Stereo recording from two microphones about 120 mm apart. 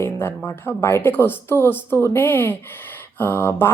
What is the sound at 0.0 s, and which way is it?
A woman's voice, 20° left (ahead or behind).